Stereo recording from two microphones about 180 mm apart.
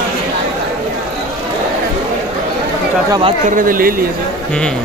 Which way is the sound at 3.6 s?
50° right (ahead or behind).